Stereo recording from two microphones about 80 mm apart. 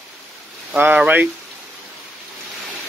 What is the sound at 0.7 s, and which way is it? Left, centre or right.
Speech, right.